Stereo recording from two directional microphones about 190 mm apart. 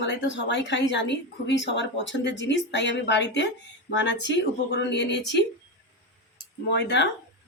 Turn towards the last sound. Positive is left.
turn(degrees=65)  # may be behind; listen again after turning